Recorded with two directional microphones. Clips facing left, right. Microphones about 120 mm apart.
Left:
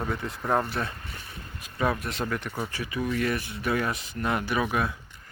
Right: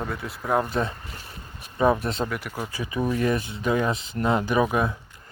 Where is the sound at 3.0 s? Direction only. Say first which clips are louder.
Right 4 dB; 25° right (ahead or behind).